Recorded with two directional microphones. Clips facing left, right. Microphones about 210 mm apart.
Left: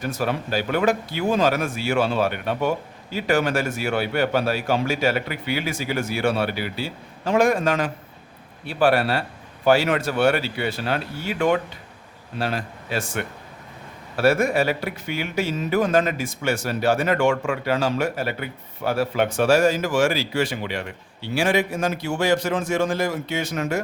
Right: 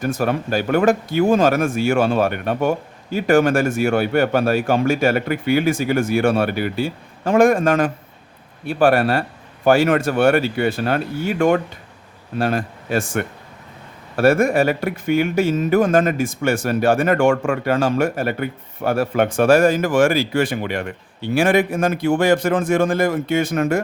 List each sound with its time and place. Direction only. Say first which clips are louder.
0.0 s speech: right 5 dB; 50° right (ahead or behind)